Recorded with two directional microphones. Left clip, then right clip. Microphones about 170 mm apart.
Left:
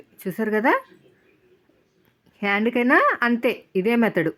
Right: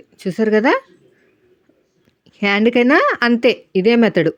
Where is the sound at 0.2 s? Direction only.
30° right (ahead or behind).